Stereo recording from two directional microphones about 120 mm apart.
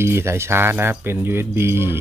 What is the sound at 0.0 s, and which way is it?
Speech, 20° right (ahead or behind).